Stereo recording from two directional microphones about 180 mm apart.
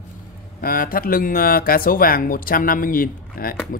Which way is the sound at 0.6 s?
55° left (ahead or behind).